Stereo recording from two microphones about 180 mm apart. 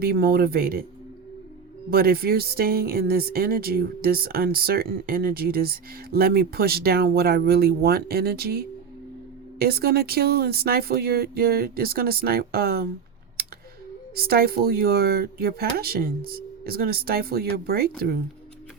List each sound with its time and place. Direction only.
0.0 s speech: 55° right (ahead or behind)
1.9 s speech: 60° right (ahead or behind)
14.2 s speech: 60° right (ahead or behind)